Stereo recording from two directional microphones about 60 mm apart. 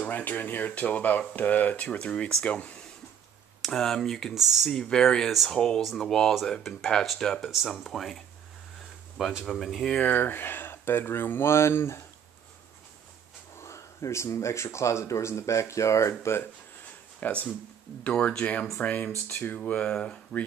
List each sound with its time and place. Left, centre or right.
0.0 s speech: left
3.6 s speech: centre
4.3 s speech: centre
4.6 s speech: centre
5.3 s speech: centre
9.2 s speech: centre
9.9 s speech: left
13.6 s speech: left
17.2 s speech: left
19.6 s speech: left